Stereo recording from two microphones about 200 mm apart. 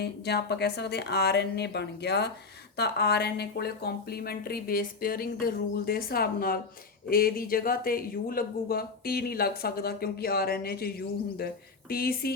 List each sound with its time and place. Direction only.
0.0 s a woman's voice: 55° left (ahead or behind)